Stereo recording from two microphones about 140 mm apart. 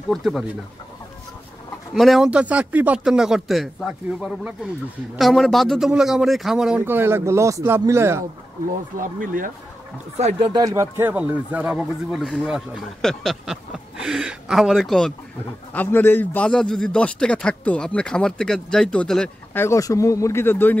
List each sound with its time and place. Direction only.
0.1 s speech: centre (ahead or behind)
2.0 s speech: centre (ahead or behind)
6.8 s speech: 15° right (ahead or behind)
8.9 s speech: 70° right (ahead or behind)
10.5 s speech: 25° right (ahead or behind); by 15.1 s 5° left (ahead or behind)
15.7 s a man's voice: 15° left (ahead or behind)
19.5 s speech: 20° left (ahead or behind)